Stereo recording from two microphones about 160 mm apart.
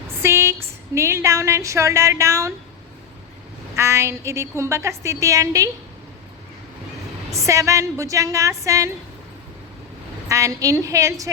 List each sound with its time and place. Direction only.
0.2 s a sound: 15° right (ahead or behind)
0.9 s a woman's voice: 15° right (ahead or behind)
3.8 s a woman's voice: 15° right (ahead or behind)
7.4 s a woman's voice: 20° right (ahead or behind)
10.2 s a woman's voice: 20° right (ahead or behind)